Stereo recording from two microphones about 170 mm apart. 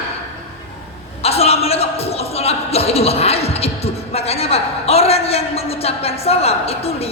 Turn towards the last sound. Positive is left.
turn(degrees=35)  # may be behind; listen again after turning